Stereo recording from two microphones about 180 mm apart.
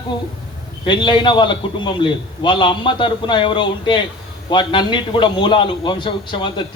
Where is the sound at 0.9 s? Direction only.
25° left (ahead or behind).